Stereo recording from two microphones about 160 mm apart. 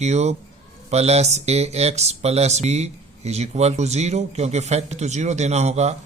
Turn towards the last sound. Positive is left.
turn(degrees=-45)  # may be behind; listen again after turning